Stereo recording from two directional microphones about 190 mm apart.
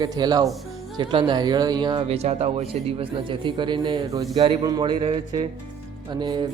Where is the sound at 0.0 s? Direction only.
20° right (ahead or behind).